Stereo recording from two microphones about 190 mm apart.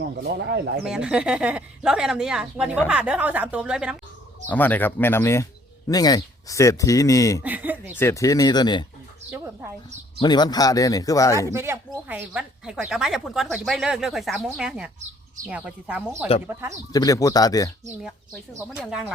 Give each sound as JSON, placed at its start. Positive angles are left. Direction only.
{"t": 0.2, "sound": "speech", "side_deg": -55}
{"t": 0.9, "sound": "speech", "side_deg": -5}
{"t": 4.4, "sound": "speech", "side_deg": 10}
{"t": 7.4, "sound": "speech", "side_deg": -10}
{"t": 7.9, "sound": "speech", "side_deg": 15}
{"t": 9.3, "sound": "speech", "side_deg": -10}
{"t": 10.2, "sound": "speech", "side_deg": 20}
{"t": 11.5, "sound": "speech", "side_deg": -15}
{"t": 16.9, "sound": "speech", "side_deg": 20}
{"t": 18.7, "sound": "speech", "side_deg": -5}